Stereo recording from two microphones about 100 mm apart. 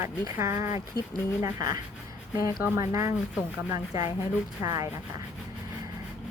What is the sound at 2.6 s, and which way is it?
A woman's voice, 30° right (ahead or behind).